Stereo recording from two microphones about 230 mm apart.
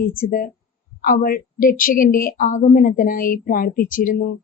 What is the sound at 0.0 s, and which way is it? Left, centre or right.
A woman's voice, left.